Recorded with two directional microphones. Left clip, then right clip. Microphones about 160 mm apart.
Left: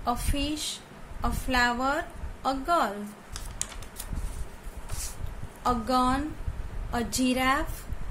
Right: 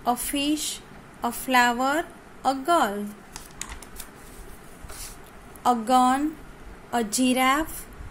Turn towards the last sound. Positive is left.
turn(degrees=-30)  # may be behind; listen again after turning